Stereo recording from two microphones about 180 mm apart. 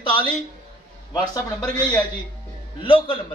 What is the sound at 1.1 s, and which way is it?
Speech, 20° left (ahead or behind).